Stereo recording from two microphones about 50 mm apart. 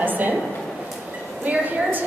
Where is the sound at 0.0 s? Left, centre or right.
Right.